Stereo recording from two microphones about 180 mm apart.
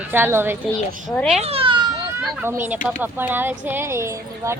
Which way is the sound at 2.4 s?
10° right (ahead or behind).